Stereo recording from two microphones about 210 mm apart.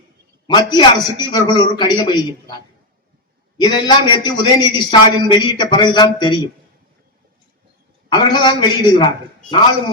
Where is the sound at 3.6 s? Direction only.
20° left (ahead or behind).